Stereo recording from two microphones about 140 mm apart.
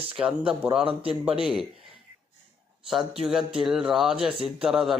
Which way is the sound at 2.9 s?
5° right (ahead or behind).